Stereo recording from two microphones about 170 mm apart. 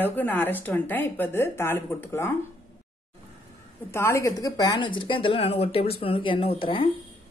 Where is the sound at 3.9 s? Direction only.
15° left (ahead or behind); by 6.9 s 30° left (ahead or behind).